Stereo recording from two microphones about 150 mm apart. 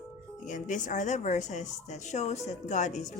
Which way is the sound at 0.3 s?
55° left (ahead or behind).